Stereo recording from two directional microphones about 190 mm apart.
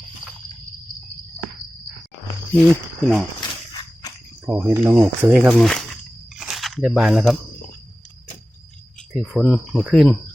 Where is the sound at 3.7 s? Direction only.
20° left (ahead or behind).